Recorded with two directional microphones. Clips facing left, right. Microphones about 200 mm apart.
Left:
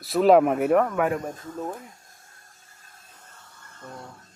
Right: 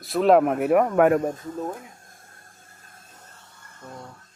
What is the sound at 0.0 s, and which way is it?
Speech, centre (ahead or behind).